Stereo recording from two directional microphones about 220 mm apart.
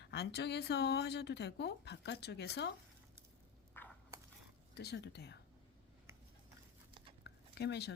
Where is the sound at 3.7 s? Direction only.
10° left (ahead or behind).